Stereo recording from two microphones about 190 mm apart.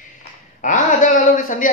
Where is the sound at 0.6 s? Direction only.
40° left (ahead or behind).